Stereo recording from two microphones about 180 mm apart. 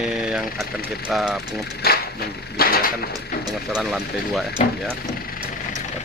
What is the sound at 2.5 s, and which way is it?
Speech, 55° left (ahead or behind).